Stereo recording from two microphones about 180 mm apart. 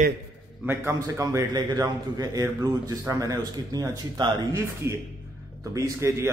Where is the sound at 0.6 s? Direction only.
15° right (ahead or behind).